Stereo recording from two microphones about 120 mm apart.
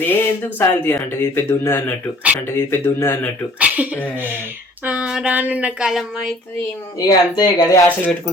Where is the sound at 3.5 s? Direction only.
10° right (ahead or behind).